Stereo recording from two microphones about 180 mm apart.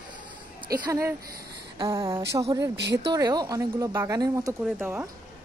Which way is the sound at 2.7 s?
70° right (ahead or behind).